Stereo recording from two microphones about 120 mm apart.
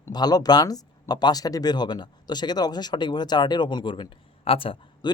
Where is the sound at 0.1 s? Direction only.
35° left (ahead or behind).